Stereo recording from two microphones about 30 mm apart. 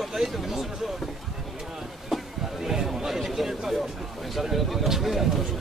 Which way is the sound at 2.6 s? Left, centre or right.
Centre.